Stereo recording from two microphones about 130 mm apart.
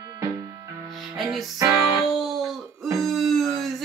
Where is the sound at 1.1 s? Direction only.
Centre (ahead or behind).